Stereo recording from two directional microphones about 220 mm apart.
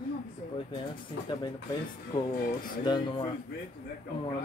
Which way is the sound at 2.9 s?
20° left (ahead or behind).